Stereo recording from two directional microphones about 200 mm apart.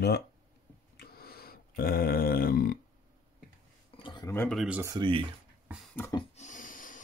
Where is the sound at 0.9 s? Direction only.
50° left (ahead or behind).